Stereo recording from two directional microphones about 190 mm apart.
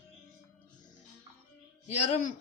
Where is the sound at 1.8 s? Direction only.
40° left (ahead or behind).